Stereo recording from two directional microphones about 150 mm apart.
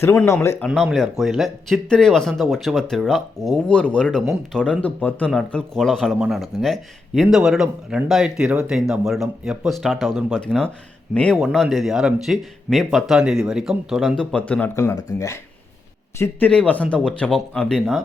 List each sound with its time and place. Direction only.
0.0 s speech: 15° left (ahead or behind)
0.7 s speech: centre (ahead or behind)